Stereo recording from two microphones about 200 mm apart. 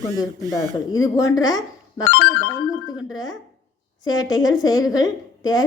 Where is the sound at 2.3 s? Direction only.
70° left (ahead or behind).